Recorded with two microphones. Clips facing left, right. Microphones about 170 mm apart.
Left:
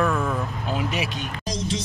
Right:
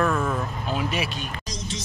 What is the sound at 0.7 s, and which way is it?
Speech, 15° left (ahead or behind).